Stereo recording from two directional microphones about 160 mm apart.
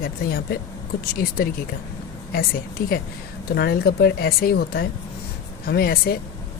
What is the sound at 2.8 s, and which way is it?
Speech, 65° left (ahead or behind).